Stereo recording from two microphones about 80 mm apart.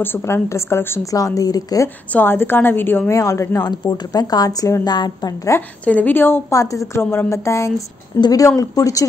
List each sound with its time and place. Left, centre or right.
0.0 s a woman's voice: left
1.1 s speech: left
2.1 s a woman's voice: left
3.1 s speech: left
4.8 s a woman's voice: left
5.5 s a woman's voice: left
5.9 s a woman's voice: left
6.5 s a woman's voice: left